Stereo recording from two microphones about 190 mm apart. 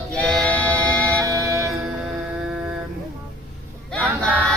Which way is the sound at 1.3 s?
15° right (ahead or behind).